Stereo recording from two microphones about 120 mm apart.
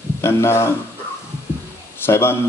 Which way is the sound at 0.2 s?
25° left (ahead or behind).